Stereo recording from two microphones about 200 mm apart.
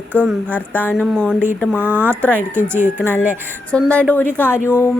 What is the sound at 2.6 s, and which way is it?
Speech, 40° left (ahead or behind).